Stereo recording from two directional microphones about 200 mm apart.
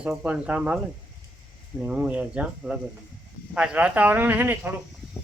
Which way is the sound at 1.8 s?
5° right (ahead or behind).